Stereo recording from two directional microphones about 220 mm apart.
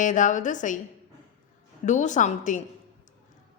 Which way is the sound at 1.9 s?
35° left (ahead or behind).